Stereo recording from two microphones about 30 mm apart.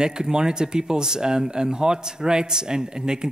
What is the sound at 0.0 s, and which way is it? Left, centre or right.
Speech, right.